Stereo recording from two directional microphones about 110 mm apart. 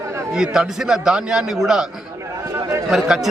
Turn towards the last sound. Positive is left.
turn(degrees=-5)  # may be behind; listen again after turning